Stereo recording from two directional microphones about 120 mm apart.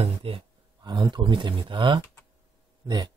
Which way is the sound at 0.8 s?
40° right (ahead or behind).